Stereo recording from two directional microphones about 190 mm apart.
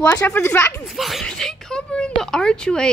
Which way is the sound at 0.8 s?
Centre (ahead or behind).